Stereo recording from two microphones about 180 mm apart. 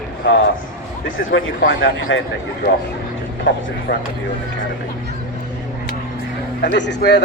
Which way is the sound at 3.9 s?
65° left (ahead or behind).